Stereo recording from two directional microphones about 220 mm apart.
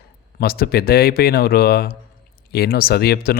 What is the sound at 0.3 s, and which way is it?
Speech, 45° left (ahead or behind).